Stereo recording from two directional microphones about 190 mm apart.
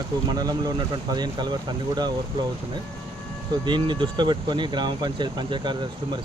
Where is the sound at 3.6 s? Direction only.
25° right (ahead or behind).